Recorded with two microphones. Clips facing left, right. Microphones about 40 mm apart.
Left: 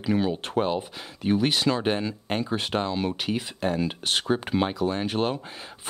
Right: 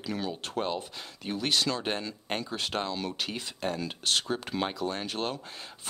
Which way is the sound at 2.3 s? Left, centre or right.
Centre.